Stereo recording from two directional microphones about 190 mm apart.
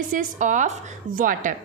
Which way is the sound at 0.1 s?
45° right (ahead or behind).